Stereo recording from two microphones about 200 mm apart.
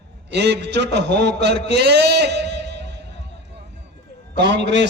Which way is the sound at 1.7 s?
55° right (ahead or behind).